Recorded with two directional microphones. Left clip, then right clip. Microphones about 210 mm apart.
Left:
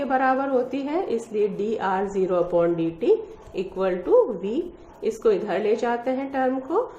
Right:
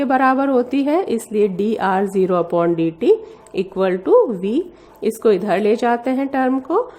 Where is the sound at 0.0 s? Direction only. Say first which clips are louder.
Right 6 dB; 50° right (ahead or behind).